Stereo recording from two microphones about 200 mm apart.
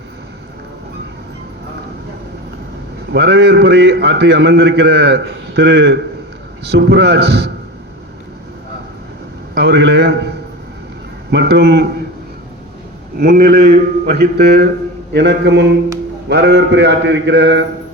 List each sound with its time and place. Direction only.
3.1 s a man's voice: 55° right (ahead or behind)
9.6 s a man's voice: 55° right (ahead or behind)
13.1 s a man's voice: 50° right (ahead or behind)